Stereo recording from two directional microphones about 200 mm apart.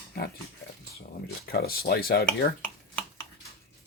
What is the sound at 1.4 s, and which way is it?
Speech, 50° left (ahead or behind).